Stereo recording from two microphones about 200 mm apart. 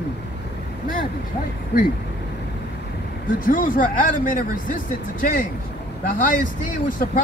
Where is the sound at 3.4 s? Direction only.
45° left (ahead or behind).